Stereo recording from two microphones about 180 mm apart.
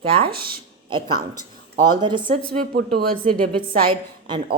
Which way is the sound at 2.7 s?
55° right (ahead or behind).